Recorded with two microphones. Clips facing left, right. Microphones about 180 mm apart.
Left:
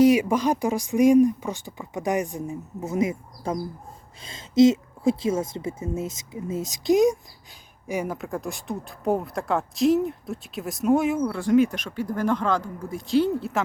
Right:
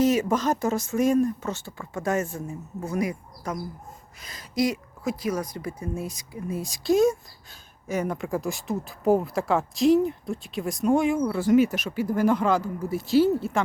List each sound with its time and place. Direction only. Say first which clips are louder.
0.0 s speech: left 4 dB; 10° left (ahead or behind)